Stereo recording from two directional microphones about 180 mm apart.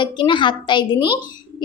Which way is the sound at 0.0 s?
25° left (ahead or behind).